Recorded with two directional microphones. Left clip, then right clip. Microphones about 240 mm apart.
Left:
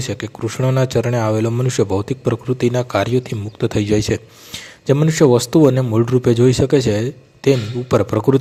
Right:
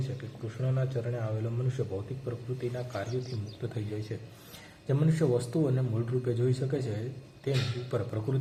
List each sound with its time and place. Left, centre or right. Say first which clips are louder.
0.2 s a man's voice: left 18 dB; left
4.9 s a man's voice: left 16 dB; left